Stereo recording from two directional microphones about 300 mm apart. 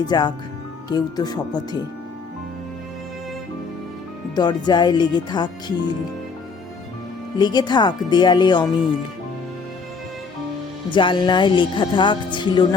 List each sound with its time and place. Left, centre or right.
0.1 s speech: centre
4.4 s speech: centre
7.3 s speech: centre
10.9 s speech: centre